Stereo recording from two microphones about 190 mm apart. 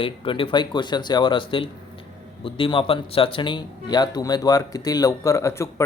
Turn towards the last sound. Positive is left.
turn(degrees=15)  # may be behind; listen again after turning